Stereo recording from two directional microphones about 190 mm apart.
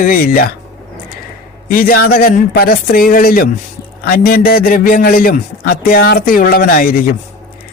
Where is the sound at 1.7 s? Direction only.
50° left (ahead or behind).